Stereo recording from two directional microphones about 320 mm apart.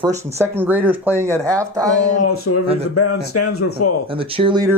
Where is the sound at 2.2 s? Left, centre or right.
Left.